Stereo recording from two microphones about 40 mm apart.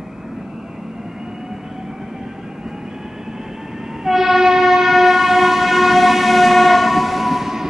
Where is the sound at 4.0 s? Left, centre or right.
Centre.